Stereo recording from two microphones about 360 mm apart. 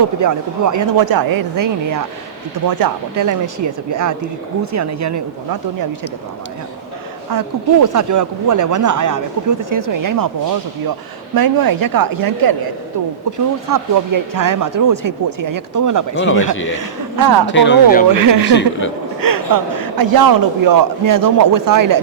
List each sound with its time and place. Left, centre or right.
0.2 s speech: right
7.3 s speech: right
13.3 s speech: right
16.1 s speech: left
16.7 s speech: right
17.4 s speech: left
18.1 s speech: right